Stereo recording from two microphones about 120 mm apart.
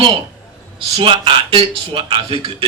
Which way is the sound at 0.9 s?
50° right (ahead or behind).